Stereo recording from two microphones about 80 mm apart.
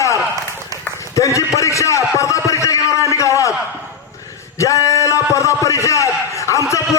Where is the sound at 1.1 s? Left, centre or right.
Left.